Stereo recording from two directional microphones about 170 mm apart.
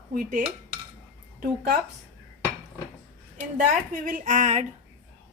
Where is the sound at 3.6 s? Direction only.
50° right (ahead or behind).